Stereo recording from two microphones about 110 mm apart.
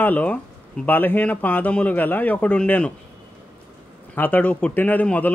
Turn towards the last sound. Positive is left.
turn(degrees=15)  # may be behind; listen again after turning